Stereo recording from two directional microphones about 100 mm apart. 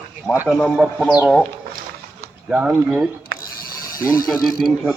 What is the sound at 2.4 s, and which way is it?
Speech, 10° right (ahead or behind).